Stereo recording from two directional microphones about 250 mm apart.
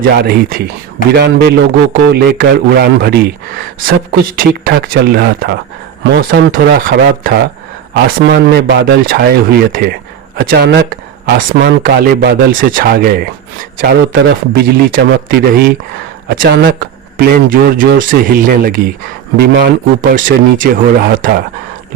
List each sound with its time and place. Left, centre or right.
0.0 s speech: right